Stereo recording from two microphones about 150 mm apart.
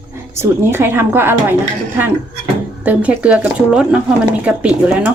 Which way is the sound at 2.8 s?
10° right (ahead or behind).